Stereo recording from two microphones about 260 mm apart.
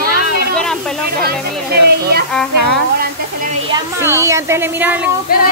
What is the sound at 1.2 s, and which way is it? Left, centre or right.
Speech, right.